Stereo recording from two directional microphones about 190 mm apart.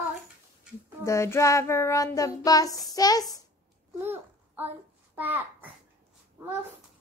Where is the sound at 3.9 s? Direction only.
10° right (ahead or behind).